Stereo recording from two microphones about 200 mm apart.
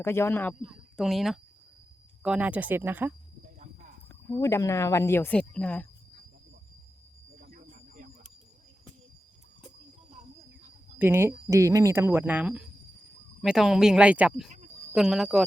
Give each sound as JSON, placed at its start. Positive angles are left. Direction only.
{"t": 0.0, "sound": "a woman's voice", "side_deg": 10}
{"t": 4.4, "sound": "a woman's voice", "side_deg": 15}
{"t": 7.4, "sound": "snake", "side_deg": -45}
{"t": 10.9, "sound": "speech", "side_deg": -10}